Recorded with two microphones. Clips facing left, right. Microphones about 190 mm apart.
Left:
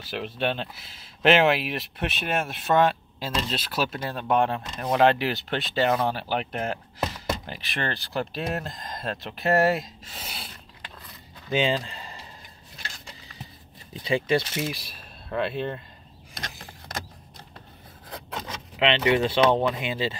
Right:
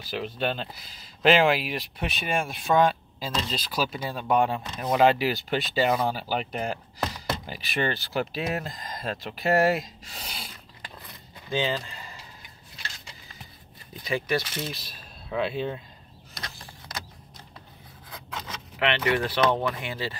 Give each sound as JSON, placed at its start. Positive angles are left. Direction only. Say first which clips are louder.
{"t": 0.1, "sound": "speech", "louder": "left 1 dB", "side_deg": 0}
{"t": 11.5, "sound": "speech", "louder": "left 3 dB", "side_deg": 20}
{"t": 14.0, "sound": "speech", "louder": "left 4 dB", "side_deg": 25}
{"t": 14.6, "sound": "speech", "louder": "left 4 dB", "side_deg": 10}
{"t": 18.8, "sound": "speech", "louder": "left 3 dB", "side_deg": 20}